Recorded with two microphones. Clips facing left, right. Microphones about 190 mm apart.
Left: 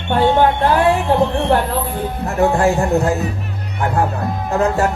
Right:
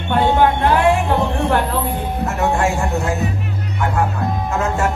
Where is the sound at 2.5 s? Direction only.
35° left (ahead or behind).